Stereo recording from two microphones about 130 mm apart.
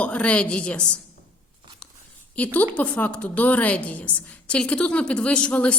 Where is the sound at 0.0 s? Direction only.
10° left (ahead or behind).